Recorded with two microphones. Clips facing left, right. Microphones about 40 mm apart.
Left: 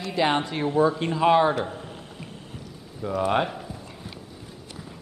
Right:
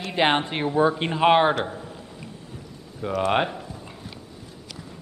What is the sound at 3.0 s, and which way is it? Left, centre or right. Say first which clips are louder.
Speech: right 1 dB; right.